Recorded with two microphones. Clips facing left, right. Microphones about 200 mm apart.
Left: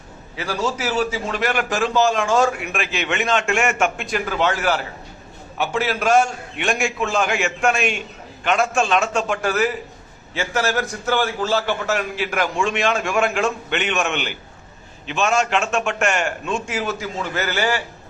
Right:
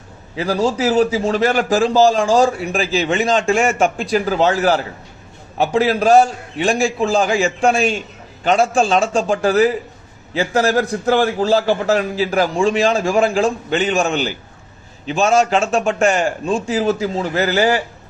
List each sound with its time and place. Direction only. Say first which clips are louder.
0.3 s a man's voice: right 6 dB; 35° right (ahead or behind)